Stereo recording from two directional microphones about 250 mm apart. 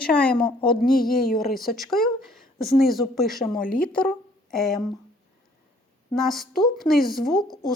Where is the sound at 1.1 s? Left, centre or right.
Left.